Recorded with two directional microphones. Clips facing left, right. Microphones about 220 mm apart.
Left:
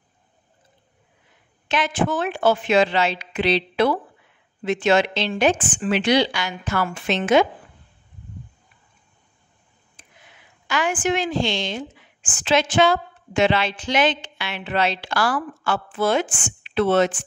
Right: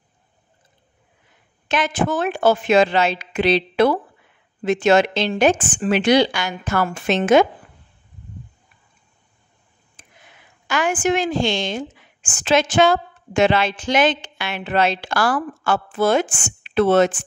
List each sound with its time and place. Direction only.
1.7 s a woman's voice: 45° right (ahead or behind)
10.0 s a sound: 50° right (ahead or behind)
10.7 s a woman's voice: 45° right (ahead or behind)